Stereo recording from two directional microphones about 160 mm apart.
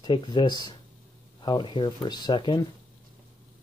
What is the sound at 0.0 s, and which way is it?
Speech, 30° left (ahead or behind).